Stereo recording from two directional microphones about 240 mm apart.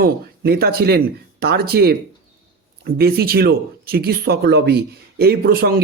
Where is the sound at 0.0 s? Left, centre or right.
Right.